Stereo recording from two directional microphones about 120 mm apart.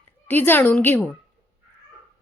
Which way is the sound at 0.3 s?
15° left (ahead or behind).